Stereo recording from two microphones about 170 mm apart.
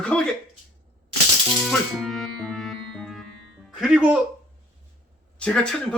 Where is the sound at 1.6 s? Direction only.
Centre (ahead or behind).